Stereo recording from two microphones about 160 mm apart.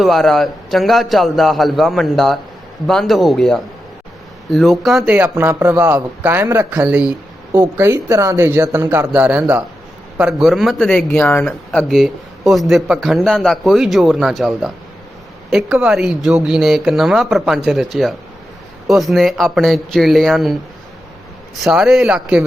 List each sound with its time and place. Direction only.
0.0 s speech: centre (ahead or behind)
5.1 s speech: 10° right (ahead or behind)